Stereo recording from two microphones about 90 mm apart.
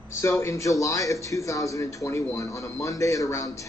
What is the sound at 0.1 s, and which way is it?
A man's voice, 30° left (ahead or behind).